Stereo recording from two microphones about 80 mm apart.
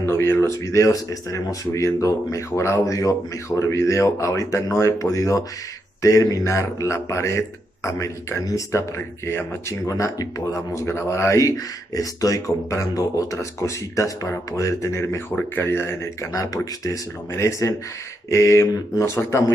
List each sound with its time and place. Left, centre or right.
0.0 s speech: left